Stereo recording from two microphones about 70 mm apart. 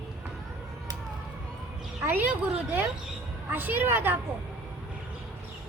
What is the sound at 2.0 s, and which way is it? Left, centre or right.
Speech, right.